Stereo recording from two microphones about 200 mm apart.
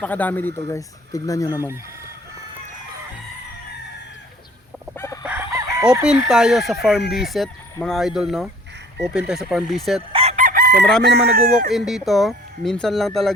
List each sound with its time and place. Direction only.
0.0 s speech: 10° left (ahead or behind)
4.9 s chicken: 15° left (ahead or behind)
5.2 s chicken: 10° right (ahead or behind)
5.9 s speech: 5° right (ahead or behind)
10.1 s chicken: 30° right (ahead or behind); by 10.8 s 50° right (ahead or behind)
11.0 s speech: 50° right (ahead or behind)
11.7 s speech: centre (ahead or behind)